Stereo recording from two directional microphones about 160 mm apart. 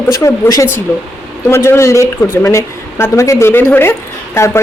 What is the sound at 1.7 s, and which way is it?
A woman's voice, 20° left (ahead or behind).